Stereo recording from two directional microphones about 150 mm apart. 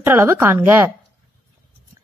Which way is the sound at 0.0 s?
15° right (ahead or behind).